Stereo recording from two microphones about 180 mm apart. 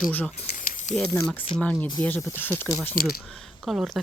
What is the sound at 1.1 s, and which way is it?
A woman's voice, 15° left (ahead or behind).